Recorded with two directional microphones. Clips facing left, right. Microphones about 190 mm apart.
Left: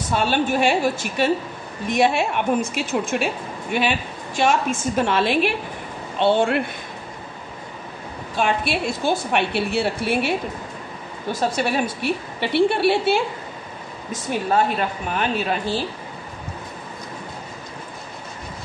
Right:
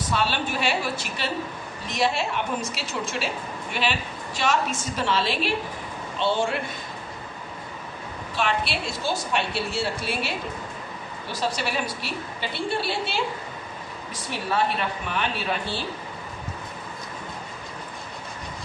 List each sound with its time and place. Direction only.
0.1 s a woman's voice: 50° left (ahead or behind)
4.4 s a woman's voice: 50° left (ahead or behind)
8.4 s a woman's voice: 50° left (ahead or behind)
11.3 s a woman's voice: 50° left (ahead or behind)
14.5 s a woman's voice: 45° left (ahead or behind)